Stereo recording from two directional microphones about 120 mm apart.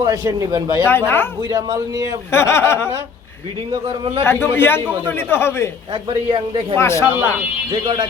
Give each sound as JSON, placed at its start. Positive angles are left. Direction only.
{"t": 0.0, "sound": "a man's voice", "side_deg": -30}
{"t": 0.9, "sound": "speech", "side_deg": 20}
{"t": 1.4, "sound": "a man's voice", "side_deg": -30}
{"t": 2.3, "sound": "speech", "side_deg": 20}
{"t": 4.2, "sound": "speech", "side_deg": 20}
{"t": 5.9, "sound": "a man's voice", "side_deg": -45}
{"t": 6.7, "sound": "speech", "side_deg": 20}
{"t": 7.7, "sound": "speech", "side_deg": -40}